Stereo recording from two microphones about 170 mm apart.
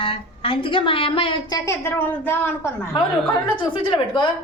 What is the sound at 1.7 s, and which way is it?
A woman's voice, 15° left (ahead or behind).